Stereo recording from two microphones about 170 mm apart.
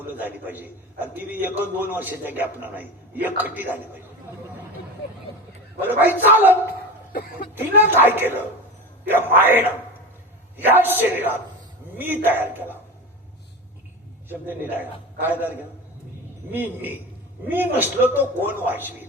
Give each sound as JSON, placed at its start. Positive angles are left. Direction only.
{"t": 0.2, "sound": "a man's voice", "side_deg": -10}
{"t": 5.8, "sound": "a man's voice", "side_deg": -10}
{"t": 7.1, "sound": "speech", "side_deg": 60}
{"t": 7.5, "sound": "a man's voice", "side_deg": -10}
{"t": 14.3, "sound": "a man's voice", "side_deg": -10}